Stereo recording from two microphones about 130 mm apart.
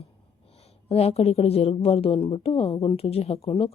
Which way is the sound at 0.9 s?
50° left (ahead or behind).